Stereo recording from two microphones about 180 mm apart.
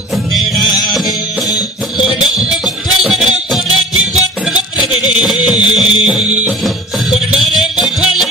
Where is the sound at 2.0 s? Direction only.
5° right (ahead or behind).